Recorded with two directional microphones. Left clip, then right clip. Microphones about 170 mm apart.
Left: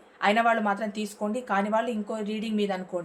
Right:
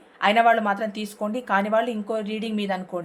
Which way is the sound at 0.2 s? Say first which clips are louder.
Right 5 dB; 35° right (ahead or behind).